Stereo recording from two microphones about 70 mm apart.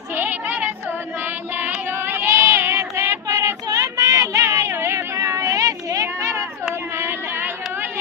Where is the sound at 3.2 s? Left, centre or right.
Right.